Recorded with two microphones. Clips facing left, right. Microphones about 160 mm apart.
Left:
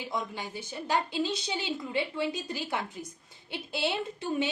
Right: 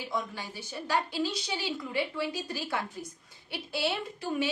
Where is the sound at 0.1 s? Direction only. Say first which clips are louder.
Even; 20° left (ahead or behind).